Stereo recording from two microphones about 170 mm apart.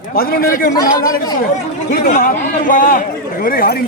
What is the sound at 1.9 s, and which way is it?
A man's voice, 60° left (ahead or behind).